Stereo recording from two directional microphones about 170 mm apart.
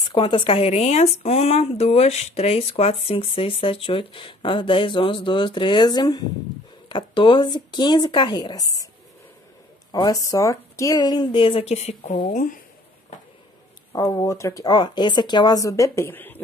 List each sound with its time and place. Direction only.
0.1 s speech: 30° left (ahead or behind)
9.9 s speech: 20° left (ahead or behind); by 12.5 s 45° left (ahead or behind)
13.9 s speech: 20° left (ahead or behind)